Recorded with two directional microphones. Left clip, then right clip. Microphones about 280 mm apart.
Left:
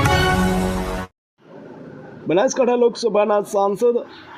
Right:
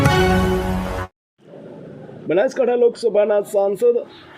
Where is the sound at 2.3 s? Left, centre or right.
Left.